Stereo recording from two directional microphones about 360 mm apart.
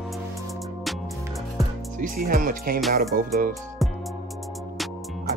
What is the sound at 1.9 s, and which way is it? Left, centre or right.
Music, right.